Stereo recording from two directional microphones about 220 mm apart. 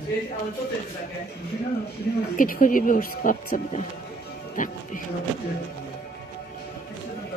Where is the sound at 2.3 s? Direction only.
40° left (ahead or behind).